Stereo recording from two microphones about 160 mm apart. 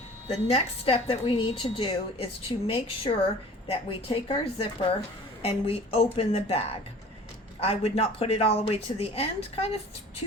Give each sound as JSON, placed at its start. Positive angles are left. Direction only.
{"t": 0.4, "sound": "a woman's voice", "side_deg": 40}